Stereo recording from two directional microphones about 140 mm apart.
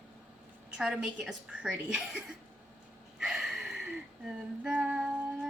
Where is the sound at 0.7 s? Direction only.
5° right (ahead or behind).